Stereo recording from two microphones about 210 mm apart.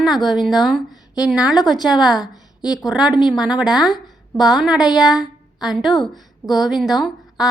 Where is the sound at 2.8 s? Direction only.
5° right (ahead or behind).